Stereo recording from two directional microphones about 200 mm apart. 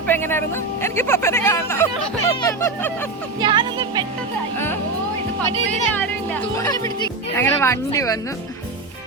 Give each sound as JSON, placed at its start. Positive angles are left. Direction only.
{"t": 0.1, "sound": "speech", "side_deg": 10}
{"t": 3.4, "sound": "a child's voice", "side_deg": -20}
{"t": 6.6, "sound": "speech", "side_deg": 15}